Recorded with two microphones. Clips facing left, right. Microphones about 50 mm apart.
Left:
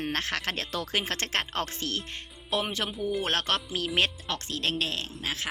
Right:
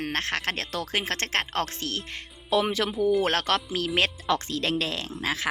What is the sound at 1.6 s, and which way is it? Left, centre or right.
Speech, right.